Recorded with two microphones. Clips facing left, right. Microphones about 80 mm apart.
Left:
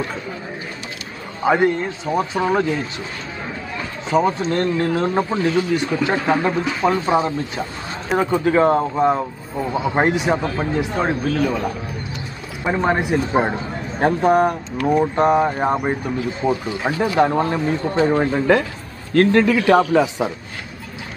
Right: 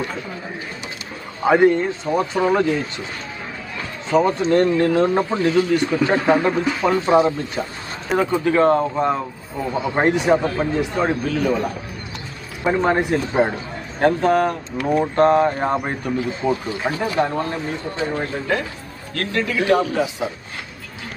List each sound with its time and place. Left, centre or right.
1.4 s speech: centre
4.1 s speech: centre
8.5 s speech: centre
12.6 s a man's voice: centre
16.4 s speech: centre
17.5 s a man's voice: left
19.1 s speech: left
19.5 s speech: left